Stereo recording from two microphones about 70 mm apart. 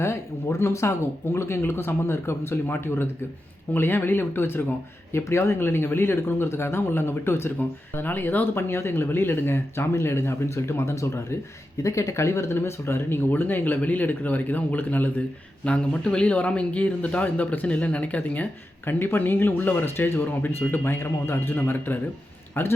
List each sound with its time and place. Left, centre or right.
0.6 s speech: left